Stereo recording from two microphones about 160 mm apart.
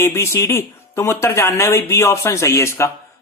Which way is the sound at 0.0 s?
15° left (ahead or behind).